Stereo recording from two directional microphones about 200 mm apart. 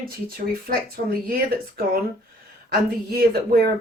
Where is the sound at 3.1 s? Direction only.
50° right (ahead or behind).